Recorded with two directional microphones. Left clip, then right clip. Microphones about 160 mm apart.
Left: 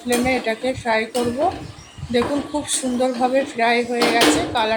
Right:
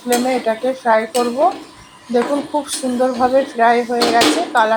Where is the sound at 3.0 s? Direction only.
10° right (ahead or behind).